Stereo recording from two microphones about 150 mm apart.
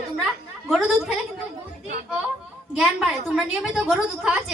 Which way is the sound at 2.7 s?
5° right (ahead or behind).